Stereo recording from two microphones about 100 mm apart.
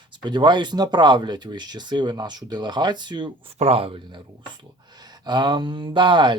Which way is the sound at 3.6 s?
80° right.